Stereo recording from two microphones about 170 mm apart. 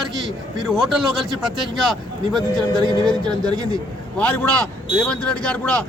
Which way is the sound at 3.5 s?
20° right (ahead or behind).